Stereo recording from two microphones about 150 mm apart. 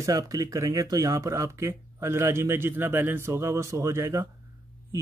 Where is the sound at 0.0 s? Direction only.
20° right (ahead or behind).